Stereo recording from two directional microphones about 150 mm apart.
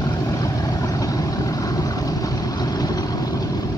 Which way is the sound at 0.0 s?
25° left (ahead or behind).